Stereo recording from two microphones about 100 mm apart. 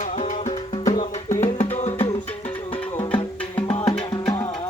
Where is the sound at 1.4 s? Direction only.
90° left.